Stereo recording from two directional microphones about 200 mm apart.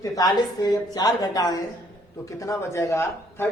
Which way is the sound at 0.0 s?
15° left (ahead or behind).